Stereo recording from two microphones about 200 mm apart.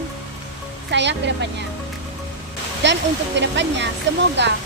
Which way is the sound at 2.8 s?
65° right (ahead or behind).